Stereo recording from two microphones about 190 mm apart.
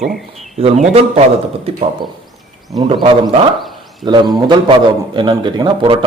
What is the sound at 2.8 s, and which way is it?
A man's voice, 30° right (ahead or behind).